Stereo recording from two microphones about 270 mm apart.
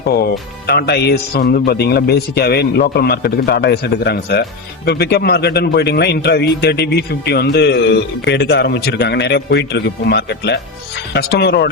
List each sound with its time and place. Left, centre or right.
0.1 s speech: left